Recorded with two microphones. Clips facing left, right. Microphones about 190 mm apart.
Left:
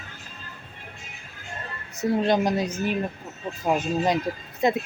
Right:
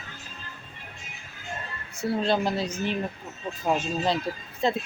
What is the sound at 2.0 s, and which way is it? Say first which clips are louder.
Speech: left 3 dB; 15° left (ahead or behind).